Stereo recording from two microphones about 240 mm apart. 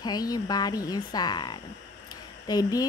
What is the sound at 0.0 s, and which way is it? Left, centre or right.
Speech, centre.